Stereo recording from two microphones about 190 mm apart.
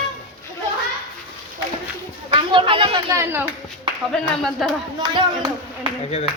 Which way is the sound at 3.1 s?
15° right (ahead or behind).